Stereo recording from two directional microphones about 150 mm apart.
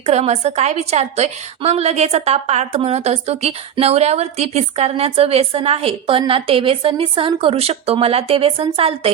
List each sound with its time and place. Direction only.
0.0 s a woman's voice: 45° right (ahead or behind)